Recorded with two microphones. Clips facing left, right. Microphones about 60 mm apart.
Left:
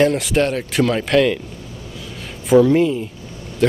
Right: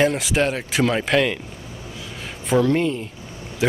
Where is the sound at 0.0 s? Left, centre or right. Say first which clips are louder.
Left 3 dB; centre.